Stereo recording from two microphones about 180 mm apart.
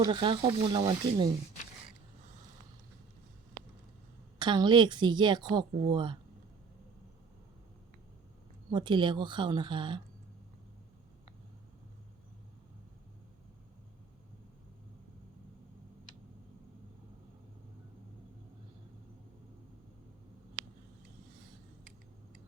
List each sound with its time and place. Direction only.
0.0 s a woman's voice: 25° right (ahead or behind)
4.4 s a woman's voice: 25° right (ahead or behind)
8.7 s a woman's voice: 25° right (ahead or behind)